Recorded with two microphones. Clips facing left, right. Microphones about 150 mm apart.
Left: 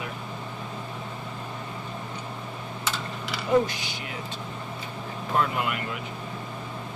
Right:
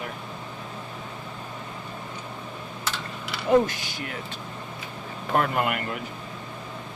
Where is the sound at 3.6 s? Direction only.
45° right (ahead or behind).